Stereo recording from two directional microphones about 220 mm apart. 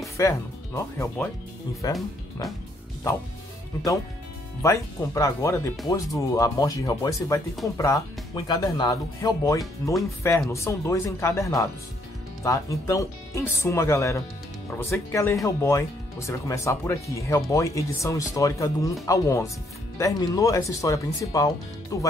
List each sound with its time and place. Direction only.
0.2 s speech: 10° left (ahead or behind)
4.6 s speech: 15° left (ahead or behind)